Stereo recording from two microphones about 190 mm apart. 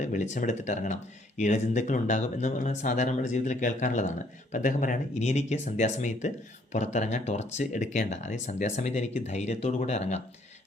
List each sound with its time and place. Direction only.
0.0 s speech: 40° left (ahead or behind)